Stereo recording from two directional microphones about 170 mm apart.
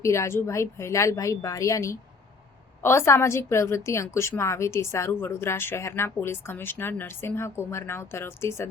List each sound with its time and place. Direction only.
0.0 s a woman's voice: 15° left (ahead or behind)